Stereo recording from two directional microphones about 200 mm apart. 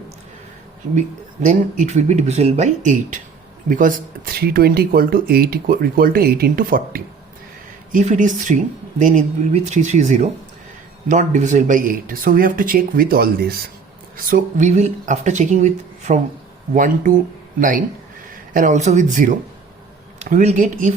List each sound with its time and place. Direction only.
1.5 s speech: 40° right (ahead or behind)